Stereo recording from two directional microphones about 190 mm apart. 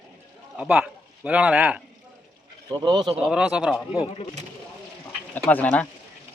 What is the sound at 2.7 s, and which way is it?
Speech, 25° right (ahead or behind).